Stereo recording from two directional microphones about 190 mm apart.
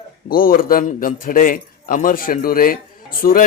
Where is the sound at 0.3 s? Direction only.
50° left (ahead or behind).